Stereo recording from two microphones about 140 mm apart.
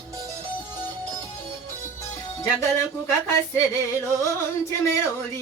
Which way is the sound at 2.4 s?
20° left (ahead or behind).